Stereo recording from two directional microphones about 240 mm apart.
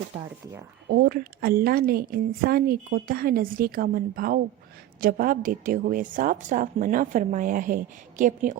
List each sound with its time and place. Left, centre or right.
0.9 s a woman's voice: right